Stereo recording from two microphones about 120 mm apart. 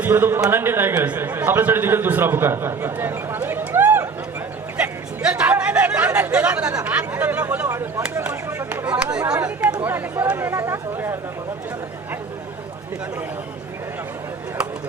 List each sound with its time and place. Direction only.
0.0 s a man's voice: 20° right (ahead or behind)
4.8 s chatter: 10° right (ahead or behind)
6.8 s speech: 15° right (ahead or behind)